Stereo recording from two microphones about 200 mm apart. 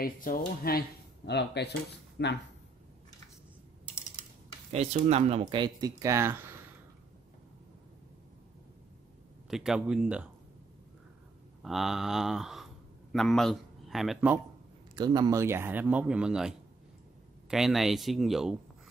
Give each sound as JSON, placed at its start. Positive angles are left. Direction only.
{"t": 0.0, "sound": "speech", "side_deg": 45}
{"t": 4.7, "sound": "speech", "side_deg": -35}
{"t": 9.5, "sound": "speech", "side_deg": -5}
{"t": 11.6, "sound": "a man's voice", "side_deg": 0}
{"t": 15.0, "sound": "speech", "side_deg": -20}